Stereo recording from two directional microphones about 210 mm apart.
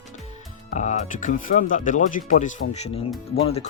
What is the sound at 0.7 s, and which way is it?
Speech, 35° left (ahead or behind).